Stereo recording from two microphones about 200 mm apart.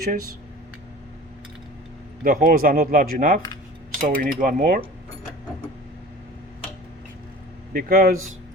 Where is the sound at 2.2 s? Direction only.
45° right (ahead or behind).